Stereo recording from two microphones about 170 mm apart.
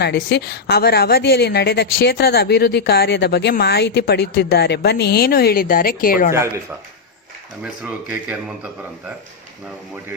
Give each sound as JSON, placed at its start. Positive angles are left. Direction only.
{"t": 0.0, "sound": "a woman's voice", "side_deg": 80}
{"t": 7.6, "sound": "a man's voice", "side_deg": -5}